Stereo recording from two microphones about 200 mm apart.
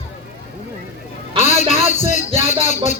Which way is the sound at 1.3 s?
35° left (ahead or behind).